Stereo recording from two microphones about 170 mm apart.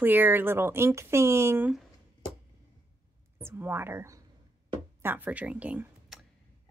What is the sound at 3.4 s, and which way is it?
A woman's voice, 15° right (ahead or behind).